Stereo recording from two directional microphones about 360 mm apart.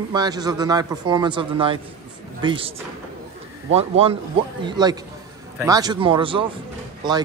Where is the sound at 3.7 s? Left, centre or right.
Centre.